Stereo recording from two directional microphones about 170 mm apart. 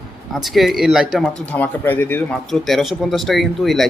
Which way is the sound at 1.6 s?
10° left (ahead or behind).